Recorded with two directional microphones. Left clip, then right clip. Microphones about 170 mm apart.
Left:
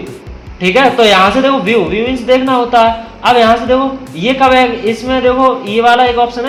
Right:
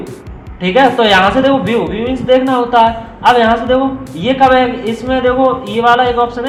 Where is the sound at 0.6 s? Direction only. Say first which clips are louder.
Left 1 dB; 20° left (ahead or behind).